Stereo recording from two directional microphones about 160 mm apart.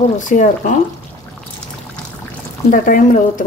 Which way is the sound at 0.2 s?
55° left (ahead or behind).